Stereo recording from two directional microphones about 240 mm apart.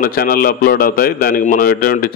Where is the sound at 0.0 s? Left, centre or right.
Left.